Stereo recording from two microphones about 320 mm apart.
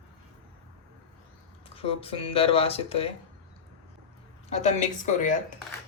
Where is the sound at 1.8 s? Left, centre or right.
Centre.